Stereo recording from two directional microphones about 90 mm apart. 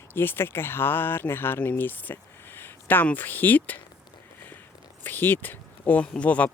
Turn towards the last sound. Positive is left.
turn(degrees=15)  # may be behind; listen again after turning